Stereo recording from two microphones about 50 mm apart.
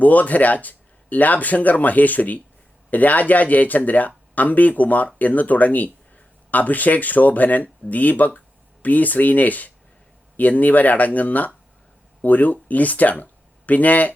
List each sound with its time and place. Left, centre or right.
0.0 s speech: left